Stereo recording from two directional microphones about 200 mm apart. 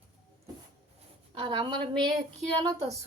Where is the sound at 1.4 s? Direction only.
25° right (ahead or behind).